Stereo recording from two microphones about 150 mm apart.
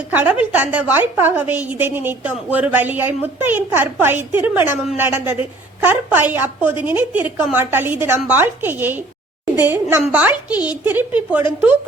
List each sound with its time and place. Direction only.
0.1 s a woman's voice: 10° right (ahead or behind)